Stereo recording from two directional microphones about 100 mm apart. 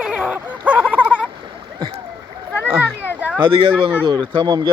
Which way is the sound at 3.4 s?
55° right (ahead or behind).